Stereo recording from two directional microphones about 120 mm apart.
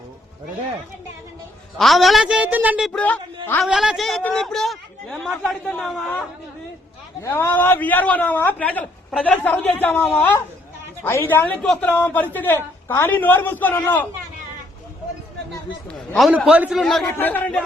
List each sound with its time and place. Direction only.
1.8 s a woman's voice: centre (ahead or behind)
3.0 s speech: 15° left (ahead or behind)
3.6 s speech: 5° right (ahead or behind)
7.2 s a woman's voice: 20° left (ahead or behind)
15.9 s a man's voice: centre (ahead or behind)
16.3 s speech: 10° right (ahead or behind)
17.1 s a woman's voice: 15° left (ahead or behind)